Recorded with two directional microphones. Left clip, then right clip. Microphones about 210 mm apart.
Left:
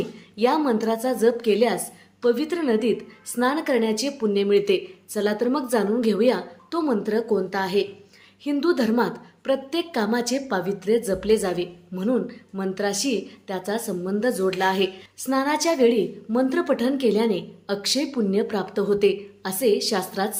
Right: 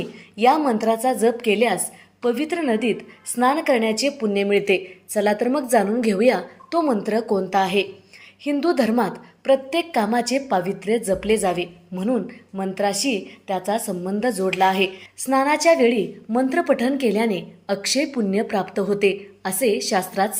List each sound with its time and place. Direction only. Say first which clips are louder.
0.3 s a woman's voice: right 4 dB; 5° right (ahead or behind)